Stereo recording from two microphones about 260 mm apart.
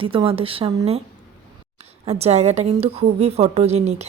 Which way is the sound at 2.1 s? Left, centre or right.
Right.